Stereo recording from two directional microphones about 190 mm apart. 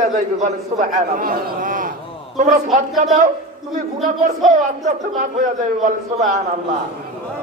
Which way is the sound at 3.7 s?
40° right (ahead or behind).